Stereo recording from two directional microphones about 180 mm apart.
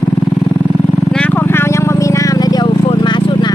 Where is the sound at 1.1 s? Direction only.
5° left (ahead or behind).